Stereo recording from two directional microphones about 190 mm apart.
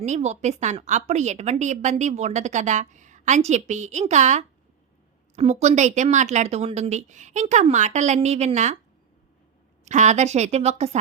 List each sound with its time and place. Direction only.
0.0 s a woman's voice: 35° right (ahead or behind)
9.8 s a woman's voice: 40° right (ahead or behind)